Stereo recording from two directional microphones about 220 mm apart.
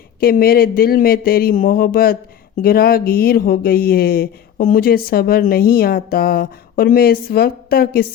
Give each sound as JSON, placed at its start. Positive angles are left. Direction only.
{"t": 0.2, "sound": "speech", "side_deg": 40}